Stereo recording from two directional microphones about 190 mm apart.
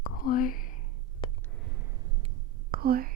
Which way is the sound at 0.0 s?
45° left (ahead or behind).